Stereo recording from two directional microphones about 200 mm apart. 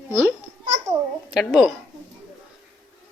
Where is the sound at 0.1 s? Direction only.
10° right (ahead or behind).